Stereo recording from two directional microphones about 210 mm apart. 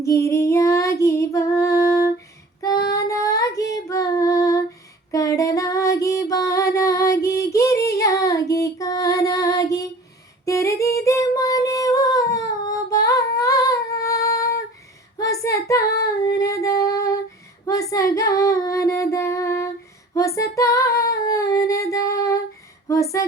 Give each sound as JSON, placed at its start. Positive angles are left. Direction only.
{"t": 0.0, "sound": "female singing", "side_deg": 15}
{"t": 2.9, "sound": "child singing", "side_deg": 15}
{"t": 5.1, "sound": "female singing", "side_deg": 15}
{"t": 6.7, "sound": "child singing", "side_deg": 15}
{"t": 10.4, "sound": "female singing", "side_deg": 15}
{"t": 13.4, "sound": "humming", "side_deg": 15}
{"t": 15.2, "sound": "child singing", "side_deg": 15}
{"t": 16.4, "sound": "singing", "side_deg": 15}
{"t": 17.7, "sound": "female singing", "side_deg": 15}
{"t": 22.9, "sound": "a sound", "side_deg": 15}